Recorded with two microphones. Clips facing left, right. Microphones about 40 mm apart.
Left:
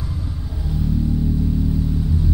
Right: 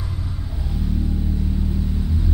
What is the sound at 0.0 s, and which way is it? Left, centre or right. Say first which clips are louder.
Vehicle: left 2 dB; centre.